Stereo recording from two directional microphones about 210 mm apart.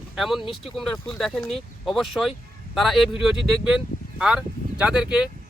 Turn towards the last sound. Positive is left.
turn(degrees=-5)  # may be behind; listen again after turning